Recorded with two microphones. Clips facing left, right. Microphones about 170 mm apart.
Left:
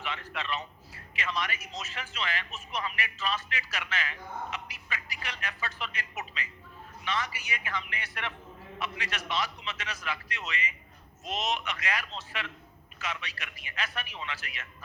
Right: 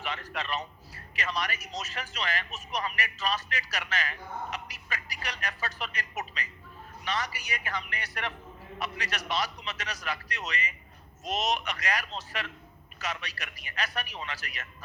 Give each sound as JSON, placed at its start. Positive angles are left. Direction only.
{"t": 0.0, "sound": "a man's voice", "side_deg": -40}